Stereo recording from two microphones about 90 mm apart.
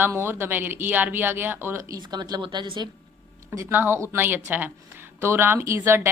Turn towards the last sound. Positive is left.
turn(degrees=-25)  # may be behind; listen again after turning